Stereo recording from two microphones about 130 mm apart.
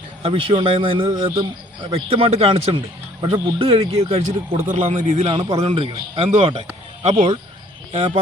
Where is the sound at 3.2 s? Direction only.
40° right (ahead or behind).